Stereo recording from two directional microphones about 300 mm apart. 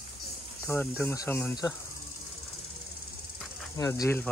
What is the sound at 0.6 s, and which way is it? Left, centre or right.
Speech, centre.